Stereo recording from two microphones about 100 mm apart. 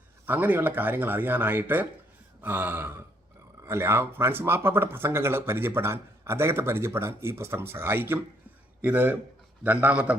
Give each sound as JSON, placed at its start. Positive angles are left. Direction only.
{"t": 0.3, "sound": "a man's voice", "side_deg": -20}